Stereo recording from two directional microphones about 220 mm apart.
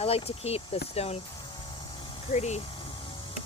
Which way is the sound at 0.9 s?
25° left (ahead or behind).